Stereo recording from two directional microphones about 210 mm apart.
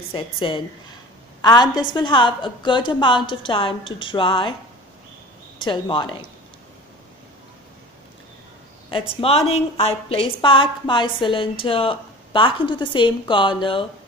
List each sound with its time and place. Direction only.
0.1 s a woman's voice: 25° left (ahead or behind)
5.6 s a woman's voice: 25° left (ahead or behind)
9.1 s a woman's voice: 25° left (ahead or behind)